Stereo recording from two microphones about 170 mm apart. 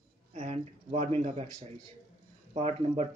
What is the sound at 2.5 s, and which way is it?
Speech, 40° right (ahead or behind).